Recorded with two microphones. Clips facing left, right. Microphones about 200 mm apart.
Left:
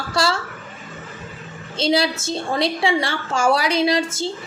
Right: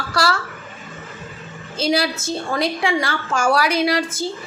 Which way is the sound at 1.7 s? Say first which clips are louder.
Left 1 dB; 25° left (ahead or behind).